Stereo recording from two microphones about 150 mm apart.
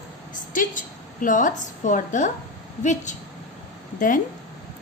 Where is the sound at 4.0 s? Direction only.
65° left (ahead or behind).